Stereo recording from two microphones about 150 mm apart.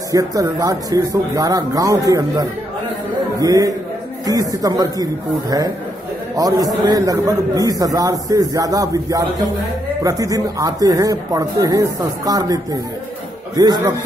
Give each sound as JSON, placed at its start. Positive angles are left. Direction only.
{"t": 0.1, "sound": "a man's voice", "side_deg": -25}
{"t": 13.6, "sound": "a man's voice", "side_deg": -25}